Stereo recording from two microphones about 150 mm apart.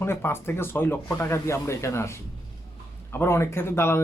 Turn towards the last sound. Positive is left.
turn(degrees=15)  # may be behind; listen again after turning